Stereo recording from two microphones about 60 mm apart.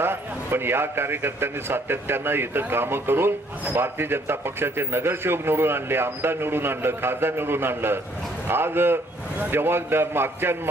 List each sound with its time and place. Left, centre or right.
0.0 s a man's voice: right